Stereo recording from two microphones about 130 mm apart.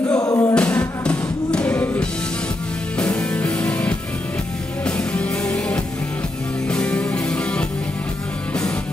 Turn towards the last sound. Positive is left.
turn(degrees=10)  # may be behind; listen again after turning